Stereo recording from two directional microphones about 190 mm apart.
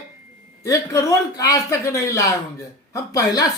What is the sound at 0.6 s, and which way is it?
Speech, 15° left (ahead or behind).